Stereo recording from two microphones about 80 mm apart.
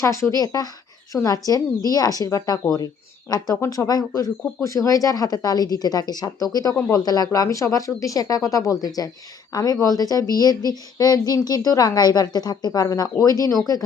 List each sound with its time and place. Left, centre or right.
0.0 s speech: left
7.3 s speech: left